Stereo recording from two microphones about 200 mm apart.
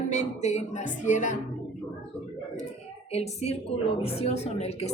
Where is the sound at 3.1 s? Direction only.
30° left (ahead or behind).